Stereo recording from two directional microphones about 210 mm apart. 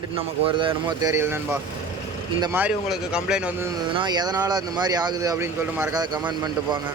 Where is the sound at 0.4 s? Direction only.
20° right (ahead or behind).